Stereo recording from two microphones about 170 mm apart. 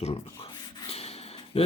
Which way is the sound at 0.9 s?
35° left (ahead or behind).